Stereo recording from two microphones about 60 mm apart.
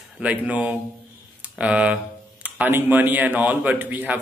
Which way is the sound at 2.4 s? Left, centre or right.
Right.